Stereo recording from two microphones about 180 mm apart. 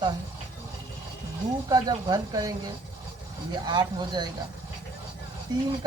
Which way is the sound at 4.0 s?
25° right (ahead or behind).